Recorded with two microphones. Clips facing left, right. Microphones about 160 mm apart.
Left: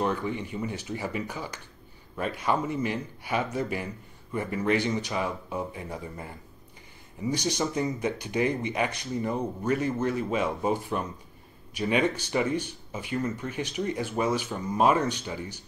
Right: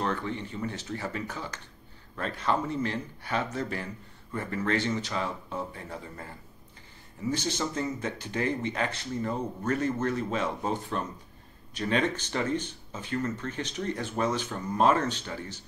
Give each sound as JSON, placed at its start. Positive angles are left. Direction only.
{"t": 0.0, "sound": "a man's voice", "side_deg": 15}